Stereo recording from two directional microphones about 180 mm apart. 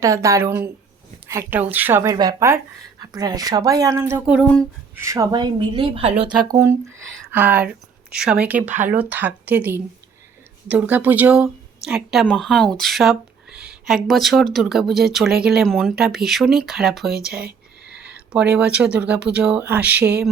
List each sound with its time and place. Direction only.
0.0 s speech: 15° right (ahead or behind)